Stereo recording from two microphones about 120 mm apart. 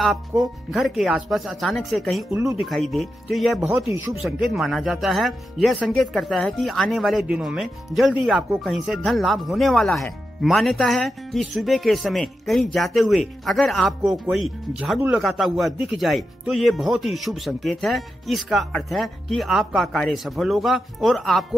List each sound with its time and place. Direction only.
0.4 s speech: centre (ahead or behind)
3.6 s speech: 20° right (ahead or behind)
4.2 s speech: centre (ahead or behind)